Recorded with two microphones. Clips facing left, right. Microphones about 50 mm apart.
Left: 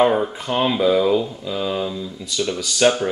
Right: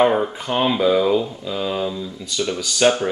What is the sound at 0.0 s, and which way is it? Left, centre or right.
Speech, centre.